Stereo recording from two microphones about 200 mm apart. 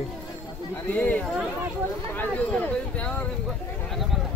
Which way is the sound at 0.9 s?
10° left (ahead or behind).